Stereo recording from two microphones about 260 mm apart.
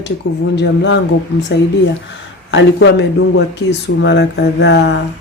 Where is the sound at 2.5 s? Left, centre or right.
Left.